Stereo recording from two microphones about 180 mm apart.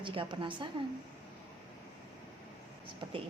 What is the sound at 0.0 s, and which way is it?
Speech, 25° right (ahead or behind).